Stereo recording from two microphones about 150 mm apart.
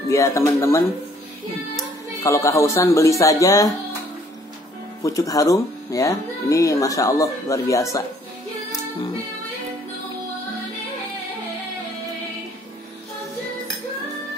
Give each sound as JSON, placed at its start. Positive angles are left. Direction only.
{"t": 0.1, "sound": "speech", "side_deg": 20}
{"t": 5.0, "sound": "speech", "side_deg": 20}